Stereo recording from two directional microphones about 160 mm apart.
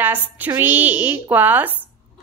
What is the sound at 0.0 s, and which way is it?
A woman's voice, 10° right (ahead or behind).